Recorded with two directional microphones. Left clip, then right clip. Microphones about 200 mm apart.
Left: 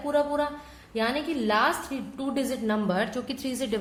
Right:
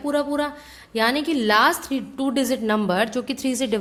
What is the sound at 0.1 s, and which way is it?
A woman's voice, 45° right (ahead or behind).